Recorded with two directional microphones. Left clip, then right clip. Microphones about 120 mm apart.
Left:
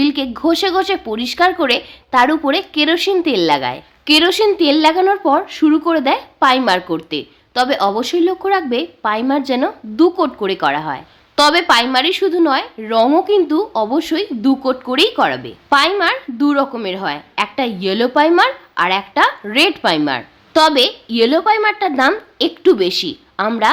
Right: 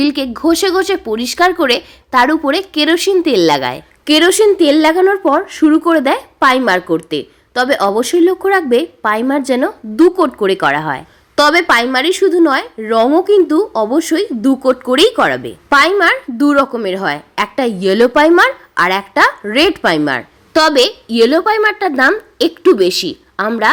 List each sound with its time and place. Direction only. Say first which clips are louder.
0.0 s a woman's voice: right 2 dB; 25° right (ahead or behind)
11.3 s a woman's voice: right 2 dB; 30° right (ahead or behind)
20.5 s speech: right 2 dB; 25° right (ahead or behind)